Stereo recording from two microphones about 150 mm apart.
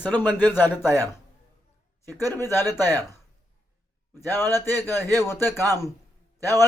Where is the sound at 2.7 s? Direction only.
25° right (ahead or behind).